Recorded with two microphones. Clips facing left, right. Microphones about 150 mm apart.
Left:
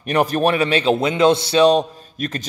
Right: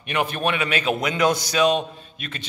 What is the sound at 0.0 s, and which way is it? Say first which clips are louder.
Speech: left 7 dB; 40° left (ahead or behind).